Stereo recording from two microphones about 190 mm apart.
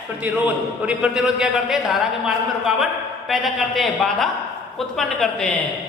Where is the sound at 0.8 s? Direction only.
5° right (ahead or behind).